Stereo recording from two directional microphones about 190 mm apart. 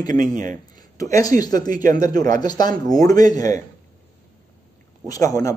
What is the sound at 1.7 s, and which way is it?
Speech, 45° right (ahead or behind).